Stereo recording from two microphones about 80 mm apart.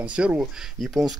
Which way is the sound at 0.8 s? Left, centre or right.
Centre.